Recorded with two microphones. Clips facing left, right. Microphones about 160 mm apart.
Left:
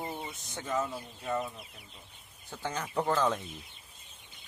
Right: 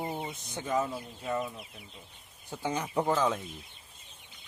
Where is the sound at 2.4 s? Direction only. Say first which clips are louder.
Right 3 dB; 15° right (ahead or behind).